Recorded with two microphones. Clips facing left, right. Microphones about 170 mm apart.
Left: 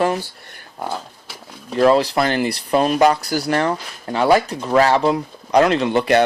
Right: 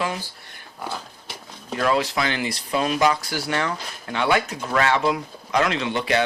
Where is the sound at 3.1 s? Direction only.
40° left (ahead or behind).